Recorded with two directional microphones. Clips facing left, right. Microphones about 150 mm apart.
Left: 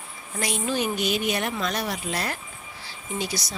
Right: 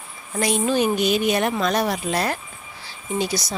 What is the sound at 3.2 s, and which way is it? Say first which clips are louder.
Speech: right 6 dB; 25° right (ahead or behind).